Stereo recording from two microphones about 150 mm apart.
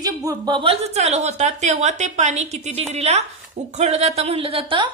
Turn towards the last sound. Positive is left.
turn(degrees=-35)  # may be behind; listen again after turning